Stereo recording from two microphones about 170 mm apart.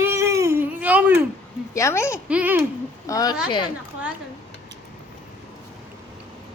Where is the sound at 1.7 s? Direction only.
15° left (ahead or behind).